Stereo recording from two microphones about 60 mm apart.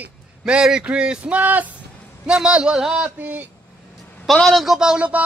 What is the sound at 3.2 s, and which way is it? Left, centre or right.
Speech, right.